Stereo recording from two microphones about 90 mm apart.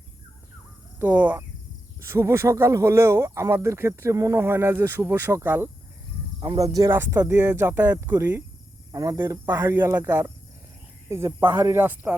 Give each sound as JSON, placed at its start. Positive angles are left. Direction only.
{"t": 0.9, "sound": "speech", "side_deg": -20}
{"t": 2.0, "sound": "speech", "side_deg": -30}
{"t": 4.4, "sound": "speech", "side_deg": -25}
{"t": 6.6, "sound": "speech", "side_deg": -40}
{"t": 6.9, "sound": "speech", "side_deg": -25}
{"t": 8.9, "sound": "speech", "side_deg": -40}
{"t": 9.5, "sound": "speech", "side_deg": -25}